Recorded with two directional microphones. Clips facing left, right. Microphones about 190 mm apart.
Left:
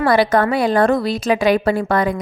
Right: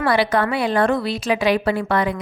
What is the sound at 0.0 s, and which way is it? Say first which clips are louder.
A woman's voice: left 4 dB; 45° left (ahead or behind).